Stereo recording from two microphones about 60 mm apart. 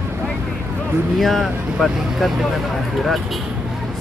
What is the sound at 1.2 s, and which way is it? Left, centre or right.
Speech, centre.